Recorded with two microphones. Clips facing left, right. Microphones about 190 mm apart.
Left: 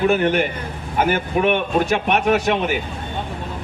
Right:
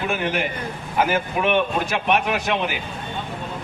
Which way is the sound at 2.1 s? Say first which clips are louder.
Left 4 dB; 45° left (ahead or behind).